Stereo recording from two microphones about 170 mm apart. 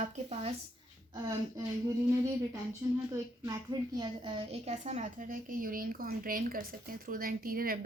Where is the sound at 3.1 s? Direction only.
20° right (ahead or behind).